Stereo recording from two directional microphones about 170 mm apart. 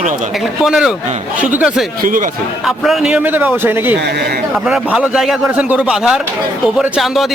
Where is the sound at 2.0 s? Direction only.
55° right (ahead or behind).